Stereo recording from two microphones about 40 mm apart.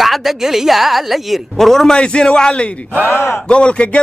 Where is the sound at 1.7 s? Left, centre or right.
Centre.